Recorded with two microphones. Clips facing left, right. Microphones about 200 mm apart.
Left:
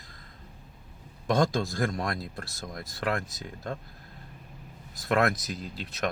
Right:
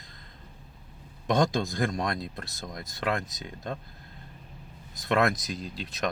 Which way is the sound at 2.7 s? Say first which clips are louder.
Even; 25° right (ahead or behind).